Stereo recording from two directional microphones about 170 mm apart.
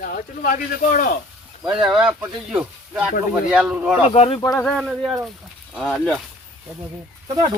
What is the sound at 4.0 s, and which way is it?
Speech, 35° left (ahead or behind).